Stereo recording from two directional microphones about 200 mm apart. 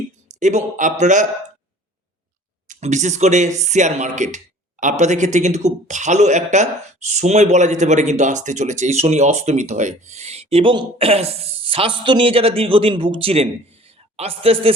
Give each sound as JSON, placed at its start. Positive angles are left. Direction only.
{"t": 0.3, "sound": "speech", "side_deg": -35}
{"t": 2.6, "sound": "speech", "side_deg": -35}